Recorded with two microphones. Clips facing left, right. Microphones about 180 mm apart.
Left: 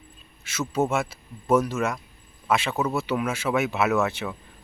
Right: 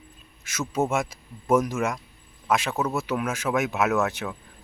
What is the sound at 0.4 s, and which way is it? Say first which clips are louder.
Speech: left 1 dB; 10° right (ahead or behind).